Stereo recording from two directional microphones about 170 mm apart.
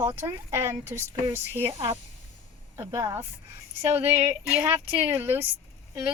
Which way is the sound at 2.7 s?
15° right (ahead or behind).